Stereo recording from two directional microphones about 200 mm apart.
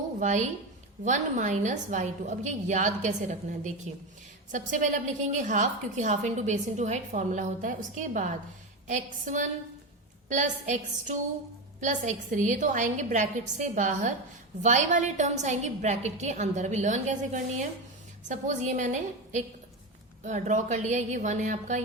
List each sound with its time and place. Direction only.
0.2 s a woman's voice: 40° right (ahead or behind)